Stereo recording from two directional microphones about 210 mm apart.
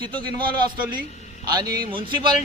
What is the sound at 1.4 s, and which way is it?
Speech, 20° right (ahead or behind).